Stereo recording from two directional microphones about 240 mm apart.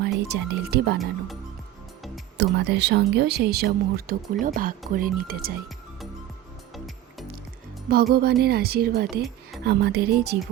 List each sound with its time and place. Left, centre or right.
0.0 s speech: right
2.4 s speech: right
6.7 s music: centre
7.9 s speech: right